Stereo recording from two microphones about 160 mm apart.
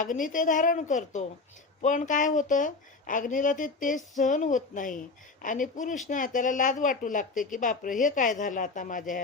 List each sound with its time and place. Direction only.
0.0 s a woman's voice: 55° left (ahead or behind)